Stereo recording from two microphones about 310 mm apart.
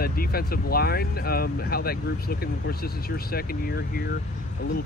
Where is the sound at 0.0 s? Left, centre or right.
Left.